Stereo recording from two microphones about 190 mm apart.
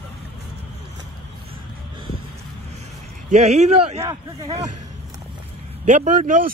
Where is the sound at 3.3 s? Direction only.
35° right (ahead or behind).